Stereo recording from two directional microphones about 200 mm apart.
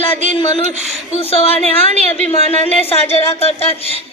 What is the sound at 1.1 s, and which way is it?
Speech, 30° left (ahead or behind).